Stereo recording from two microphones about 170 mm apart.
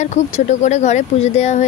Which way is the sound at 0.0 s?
45° left (ahead or behind).